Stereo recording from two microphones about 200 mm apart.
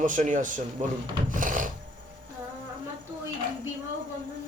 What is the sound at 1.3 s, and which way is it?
Filing, 40° right (ahead or behind).